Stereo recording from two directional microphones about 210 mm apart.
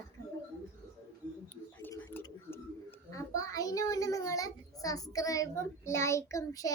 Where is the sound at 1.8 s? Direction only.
10° left (ahead or behind).